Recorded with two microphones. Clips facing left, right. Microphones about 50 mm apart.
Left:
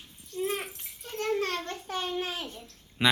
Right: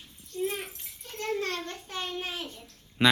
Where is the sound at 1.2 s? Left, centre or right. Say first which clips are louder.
Left 2 dB; centre.